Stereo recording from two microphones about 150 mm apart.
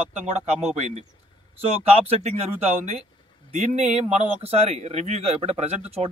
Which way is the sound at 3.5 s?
50° right (ahead or behind).